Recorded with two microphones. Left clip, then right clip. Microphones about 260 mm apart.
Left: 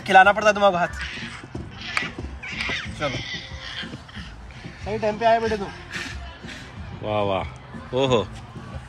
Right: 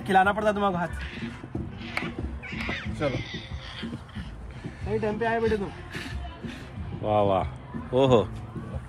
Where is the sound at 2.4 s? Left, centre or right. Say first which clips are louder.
Left 6 dB; left.